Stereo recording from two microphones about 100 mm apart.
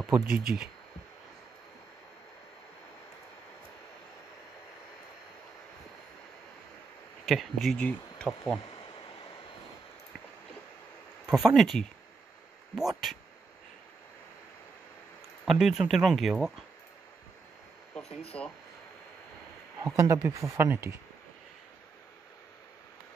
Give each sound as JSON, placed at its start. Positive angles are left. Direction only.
{"t": 0.1, "sound": "speech", "side_deg": -10}
{"t": 7.2, "sound": "speech", "side_deg": 0}
{"t": 7.7, "sound": "speech", "side_deg": 10}
{"t": 11.2, "sound": "speech", "side_deg": 0}
{"t": 15.4, "sound": "speech", "side_deg": 0}
{"t": 18.3, "sound": "speech", "side_deg": 15}
{"t": 20.0, "sound": "speech", "side_deg": -35}